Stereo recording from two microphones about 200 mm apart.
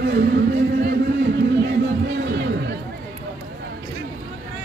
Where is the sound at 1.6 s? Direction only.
60° right (ahead or behind).